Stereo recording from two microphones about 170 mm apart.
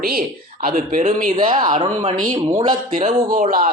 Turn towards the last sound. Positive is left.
turn(degrees=-55)  # may be behind; listen again after turning